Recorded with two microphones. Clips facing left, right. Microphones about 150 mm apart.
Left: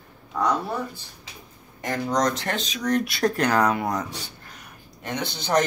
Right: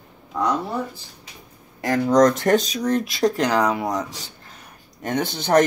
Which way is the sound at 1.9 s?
50° right (ahead or behind).